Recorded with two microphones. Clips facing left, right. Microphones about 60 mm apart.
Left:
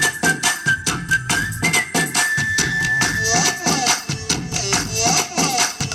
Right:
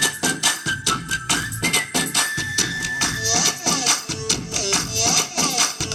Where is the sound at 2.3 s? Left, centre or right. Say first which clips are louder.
Left 6 dB; left.